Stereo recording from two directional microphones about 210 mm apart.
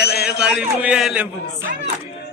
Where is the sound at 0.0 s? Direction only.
50° left (ahead or behind).